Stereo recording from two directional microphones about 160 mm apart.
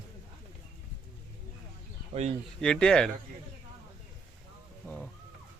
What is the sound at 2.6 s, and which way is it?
Speech, 5° left (ahead or behind).